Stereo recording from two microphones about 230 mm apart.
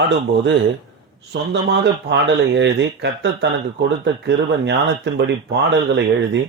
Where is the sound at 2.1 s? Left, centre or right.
Right.